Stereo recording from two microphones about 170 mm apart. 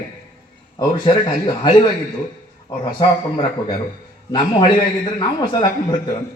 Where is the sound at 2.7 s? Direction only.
20° left (ahead or behind).